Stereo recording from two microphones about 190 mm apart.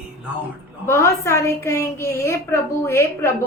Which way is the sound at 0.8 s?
15° left (ahead or behind).